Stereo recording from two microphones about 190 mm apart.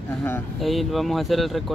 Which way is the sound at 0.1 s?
10° left (ahead or behind).